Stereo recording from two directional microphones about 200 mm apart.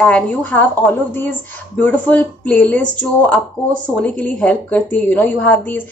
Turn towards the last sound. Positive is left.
turn(degrees=10)  # may be behind; listen again after turning